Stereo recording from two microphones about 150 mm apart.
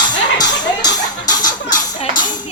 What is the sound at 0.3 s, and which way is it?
Music, 25° left (ahead or behind).